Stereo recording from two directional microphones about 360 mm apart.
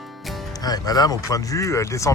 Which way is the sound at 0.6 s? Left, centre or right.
Centre.